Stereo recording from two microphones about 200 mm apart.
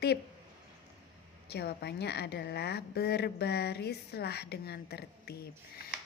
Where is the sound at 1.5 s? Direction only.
55° left (ahead or behind).